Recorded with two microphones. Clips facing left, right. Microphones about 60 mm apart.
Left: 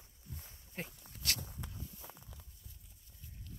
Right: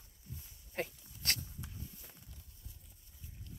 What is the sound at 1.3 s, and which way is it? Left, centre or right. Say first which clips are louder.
Walk: left 1 dB; left.